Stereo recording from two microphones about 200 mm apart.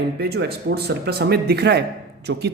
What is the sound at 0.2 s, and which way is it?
Speech, 55° right (ahead or behind).